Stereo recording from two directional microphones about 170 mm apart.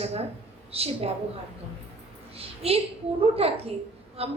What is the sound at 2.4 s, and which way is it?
A woman's voice, 35° right (ahead or behind).